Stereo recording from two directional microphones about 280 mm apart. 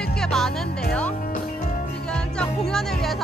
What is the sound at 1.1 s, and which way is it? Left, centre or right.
Music, left.